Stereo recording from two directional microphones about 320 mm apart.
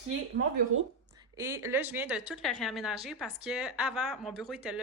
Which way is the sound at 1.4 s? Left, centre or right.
Centre.